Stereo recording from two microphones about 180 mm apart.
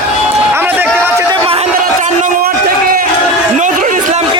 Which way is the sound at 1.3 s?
30° right (ahead or behind).